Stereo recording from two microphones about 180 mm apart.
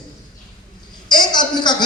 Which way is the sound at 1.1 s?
25° left (ahead or behind).